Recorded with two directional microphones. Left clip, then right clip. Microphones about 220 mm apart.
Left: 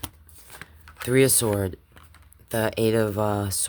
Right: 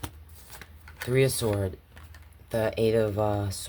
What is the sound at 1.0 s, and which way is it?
Speech, 45° left (ahead or behind).